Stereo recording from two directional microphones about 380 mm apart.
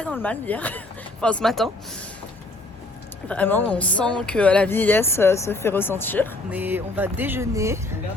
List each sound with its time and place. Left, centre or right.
0.0 s speech: centre
3.2 s speech: centre